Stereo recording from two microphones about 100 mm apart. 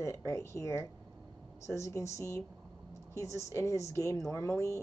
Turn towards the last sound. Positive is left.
turn(degrees=30)  # may be behind; listen again after turning